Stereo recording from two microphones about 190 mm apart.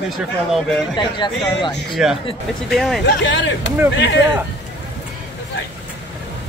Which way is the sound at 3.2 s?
70° left (ahead or behind).